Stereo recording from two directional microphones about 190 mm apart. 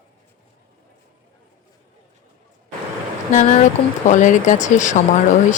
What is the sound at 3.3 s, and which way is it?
Speech, 40° left (ahead or behind).